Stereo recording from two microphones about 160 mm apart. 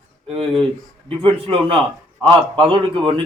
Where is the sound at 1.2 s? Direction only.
35° right (ahead or behind).